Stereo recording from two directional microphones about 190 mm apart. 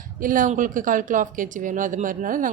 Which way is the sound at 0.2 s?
45° right (ahead or behind).